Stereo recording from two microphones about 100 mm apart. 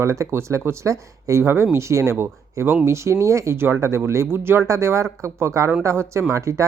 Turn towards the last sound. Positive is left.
turn(degrees=-30)  # may be behind; listen again after turning